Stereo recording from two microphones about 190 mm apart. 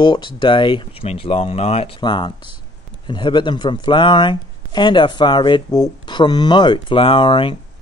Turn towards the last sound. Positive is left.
turn(degrees=25)  # may be behind; listen again after turning